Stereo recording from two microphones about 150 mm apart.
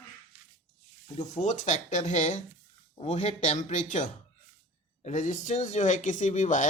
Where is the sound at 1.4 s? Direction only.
50° left (ahead or behind).